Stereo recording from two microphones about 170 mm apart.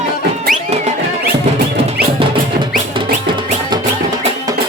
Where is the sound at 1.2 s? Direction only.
75° right (ahead or behind).